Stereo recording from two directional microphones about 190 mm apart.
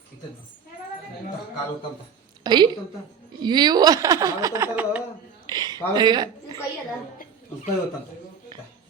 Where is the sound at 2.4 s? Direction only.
25° right (ahead or behind).